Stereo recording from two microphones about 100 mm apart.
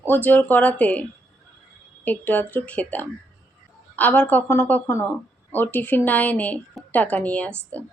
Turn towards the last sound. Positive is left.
turn(degrees=15)  # may be behind; listen again after turning